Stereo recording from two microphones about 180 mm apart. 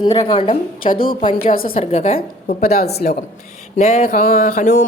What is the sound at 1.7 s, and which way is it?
Speech, 35° left (ahead or behind).